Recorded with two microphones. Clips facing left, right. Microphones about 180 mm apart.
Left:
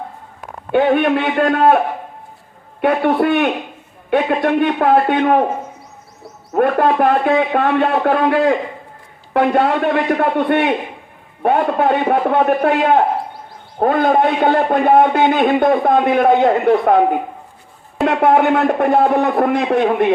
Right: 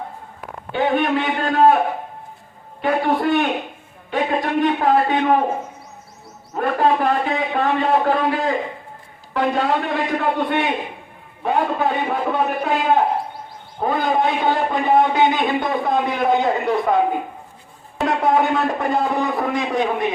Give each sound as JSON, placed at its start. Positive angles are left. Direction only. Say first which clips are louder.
{"t": 0.7, "sound": "a man's voice", "louder": "left 5 dB", "side_deg": 60}
{"t": 2.8, "sound": "a man's voice", "louder": "left 4 dB", "side_deg": 65}
{"t": 6.5, "sound": "a man's voice", "louder": "left 4 dB", "side_deg": 60}
{"t": 18.0, "sound": "a man's voice", "louder": "left 5 dB", "side_deg": 65}